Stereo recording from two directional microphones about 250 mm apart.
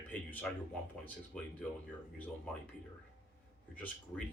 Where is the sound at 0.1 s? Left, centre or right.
Centre.